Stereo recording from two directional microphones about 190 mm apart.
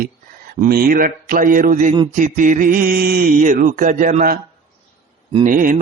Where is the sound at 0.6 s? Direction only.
50° right (ahead or behind).